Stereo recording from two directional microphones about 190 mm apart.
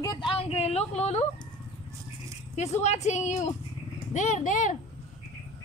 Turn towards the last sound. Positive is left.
turn(degrees=45)  # may be behind; listen again after turning